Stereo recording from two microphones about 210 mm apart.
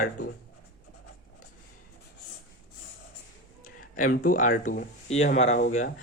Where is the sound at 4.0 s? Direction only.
40° left (ahead or behind).